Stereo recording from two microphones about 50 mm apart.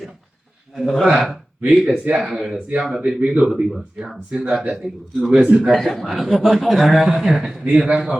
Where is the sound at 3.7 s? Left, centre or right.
Centre.